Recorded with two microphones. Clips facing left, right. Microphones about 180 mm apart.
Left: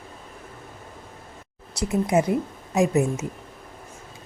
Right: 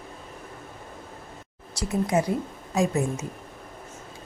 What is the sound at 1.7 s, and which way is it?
A woman's voice, 20° left (ahead or behind).